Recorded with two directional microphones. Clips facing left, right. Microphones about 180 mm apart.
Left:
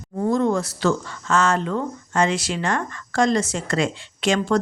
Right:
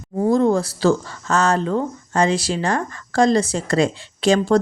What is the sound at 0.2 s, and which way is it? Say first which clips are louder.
Speech: right 4 dB; 35° right (ahead or behind).